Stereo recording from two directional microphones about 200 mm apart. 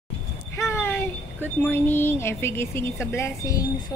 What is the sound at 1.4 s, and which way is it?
Speech, 10° left (ahead or behind).